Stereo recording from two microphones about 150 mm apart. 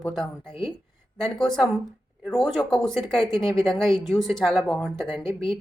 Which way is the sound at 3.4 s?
35° left (ahead or behind).